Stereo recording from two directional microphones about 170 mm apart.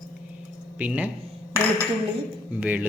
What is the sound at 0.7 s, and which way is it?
Speech, 10° right (ahead or behind).